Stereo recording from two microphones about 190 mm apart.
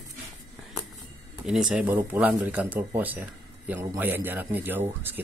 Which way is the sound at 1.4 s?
5° right (ahead or behind).